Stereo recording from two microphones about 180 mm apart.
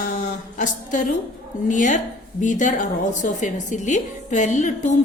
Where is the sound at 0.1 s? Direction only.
45° left (ahead or behind).